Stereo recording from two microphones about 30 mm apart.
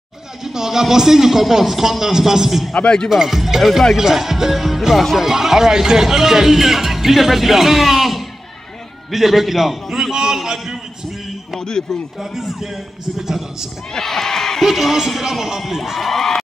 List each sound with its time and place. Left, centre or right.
0.4 s speech: centre
2.8 s speech: left
3.1 s speech: centre
10.1 s a sound: centre
11.6 s speech: left
12.2 s speech: centre
13.9 s speech: centre
14.6 s speech: centre
16.0 s speech: centre